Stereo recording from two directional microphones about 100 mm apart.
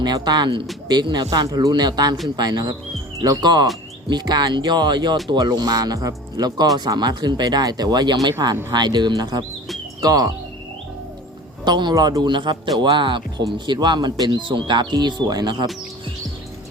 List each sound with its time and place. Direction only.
0.0 s speech: 45° right (ahead or behind)
11.6 s speech: 45° right (ahead or behind)